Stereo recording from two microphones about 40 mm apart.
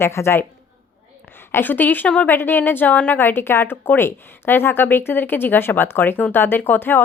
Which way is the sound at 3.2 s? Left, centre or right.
Left.